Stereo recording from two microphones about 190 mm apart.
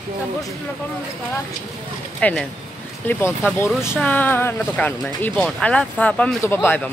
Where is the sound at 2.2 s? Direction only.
5° left (ahead or behind).